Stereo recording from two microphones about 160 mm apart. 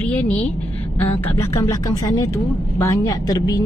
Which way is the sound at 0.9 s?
10° left (ahead or behind).